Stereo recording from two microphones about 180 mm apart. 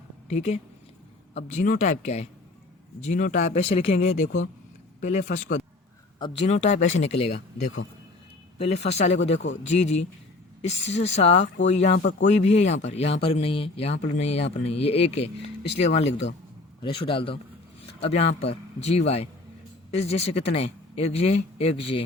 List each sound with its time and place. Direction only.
0.3 s speech: 40° left (ahead or behind)
6.1 s speech: 25° left (ahead or behind)
6.4 s speech: 40° left (ahead or behind)
11.3 s speech: 90° left
11.7 s speech: 35° left (ahead or behind)
16.8 s a man's voice: 30° left (ahead or behind)